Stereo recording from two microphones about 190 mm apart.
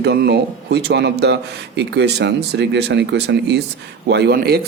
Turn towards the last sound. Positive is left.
turn(degrees=-55)  # may be behind; listen again after turning